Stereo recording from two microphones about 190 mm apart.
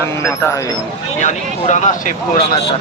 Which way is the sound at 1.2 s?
40° left (ahead or behind).